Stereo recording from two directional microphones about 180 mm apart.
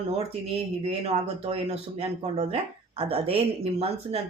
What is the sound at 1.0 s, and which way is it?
Speech, 35° right (ahead or behind).